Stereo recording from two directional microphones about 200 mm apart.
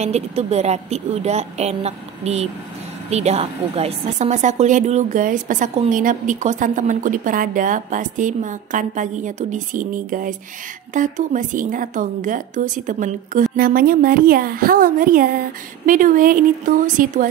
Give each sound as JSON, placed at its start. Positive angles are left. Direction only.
{"t": 0.0, "sound": "a woman's voice", "side_deg": -35}